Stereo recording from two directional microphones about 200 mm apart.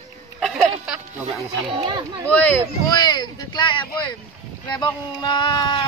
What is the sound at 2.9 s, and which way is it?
Speech, 20° left (ahead or behind).